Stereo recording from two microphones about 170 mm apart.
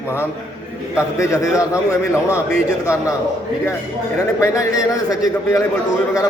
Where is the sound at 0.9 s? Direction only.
15° left (ahead or behind).